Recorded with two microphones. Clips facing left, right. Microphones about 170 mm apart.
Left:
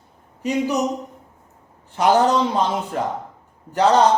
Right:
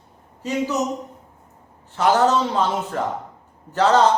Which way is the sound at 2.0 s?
15° left (ahead or behind).